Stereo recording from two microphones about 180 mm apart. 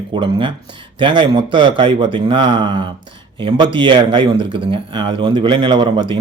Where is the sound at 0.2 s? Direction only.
25° right (ahead or behind).